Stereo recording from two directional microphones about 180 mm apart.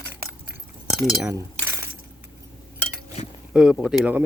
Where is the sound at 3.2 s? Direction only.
40° left (ahead or behind).